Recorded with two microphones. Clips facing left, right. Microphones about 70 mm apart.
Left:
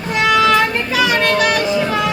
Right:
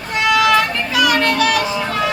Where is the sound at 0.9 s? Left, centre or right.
Left.